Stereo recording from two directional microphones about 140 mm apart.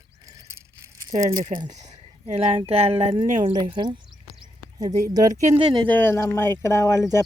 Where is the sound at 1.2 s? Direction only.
25° right (ahead or behind).